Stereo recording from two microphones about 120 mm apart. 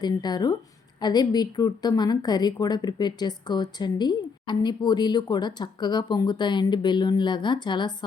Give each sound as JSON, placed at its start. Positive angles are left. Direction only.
{"t": 0.0, "sound": "a woman's voice", "side_deg": 35}